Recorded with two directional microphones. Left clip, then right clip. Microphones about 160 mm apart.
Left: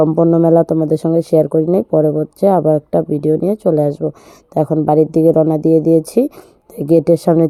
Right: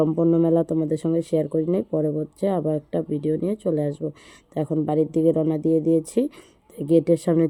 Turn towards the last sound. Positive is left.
turn(degrees=30)  # may be behind; listen again after turning